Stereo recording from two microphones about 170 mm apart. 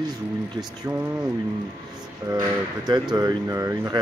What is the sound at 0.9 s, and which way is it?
Speech, 20° right (ahead or behind).